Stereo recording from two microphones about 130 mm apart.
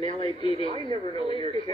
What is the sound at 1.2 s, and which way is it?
Speech, 45° right (ahead or behind).